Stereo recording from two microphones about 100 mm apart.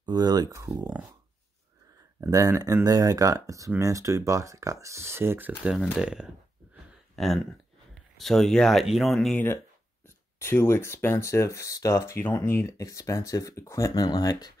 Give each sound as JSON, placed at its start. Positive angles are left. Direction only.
{"t": 0.0, "sound": "speech", "side_deg": -45}
{"t": 0.5, "sound": "speech", "side_deg": -30}
{"t": 2.2, "sound": "speech", "side_deg": -35}
{"t": 5.6, "sound": "speech", "side_deg": -10}
{"t": 7.2, "sound": "speech", "side_deg": 0}
{"t": 10.0, "sound": "speech", "side_deg": 25}